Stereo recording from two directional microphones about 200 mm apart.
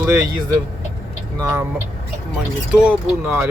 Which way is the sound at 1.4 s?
15° right (ahead or behind).